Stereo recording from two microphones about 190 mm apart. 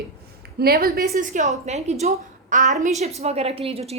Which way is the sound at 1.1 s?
40° right (ahead or behind).